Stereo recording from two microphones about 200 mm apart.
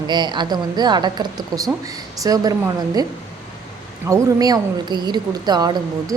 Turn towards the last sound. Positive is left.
turn(degrees=-20)  # may be behind; listen again after turning